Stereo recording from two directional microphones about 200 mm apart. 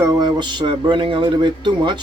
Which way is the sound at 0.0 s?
20° right (ahead or behind).